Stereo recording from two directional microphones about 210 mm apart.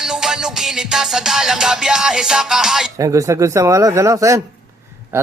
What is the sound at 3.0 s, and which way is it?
Speech, 15° right (ahead or behind).